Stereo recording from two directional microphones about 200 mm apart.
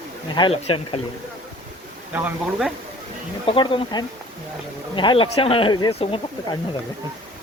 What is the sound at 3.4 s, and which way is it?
Speech, 25° left (ahead or behind).